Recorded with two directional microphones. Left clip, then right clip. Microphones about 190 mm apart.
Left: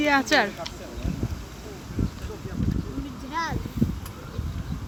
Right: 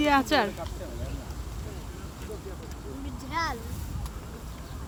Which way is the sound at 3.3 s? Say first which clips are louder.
Left 1 dB; 55° right (ahead or behind).